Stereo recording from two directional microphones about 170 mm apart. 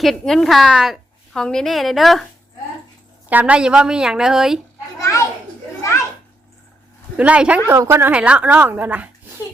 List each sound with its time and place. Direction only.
0.0 s a woman's voice: centre (ahead or behind)
3.2 s a woman's voice: 10° right (ahead or behind)
4.9 s children playing: 20° left (ahead or behind)
7.2 s speech: 5° right (ahead or behind)